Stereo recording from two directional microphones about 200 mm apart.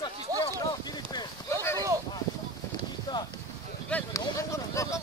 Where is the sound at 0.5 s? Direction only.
20° left (ahead or behind).